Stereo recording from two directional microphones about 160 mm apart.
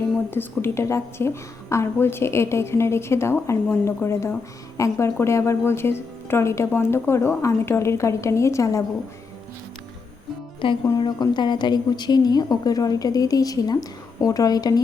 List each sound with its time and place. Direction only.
0.3 s a woman's voice: 15° left (ahead or behind)
10.8 s a woman's voice: 25° left (ahead or behind)